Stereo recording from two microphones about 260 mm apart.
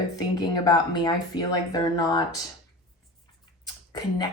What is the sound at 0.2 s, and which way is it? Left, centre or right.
A woman's voice, centre.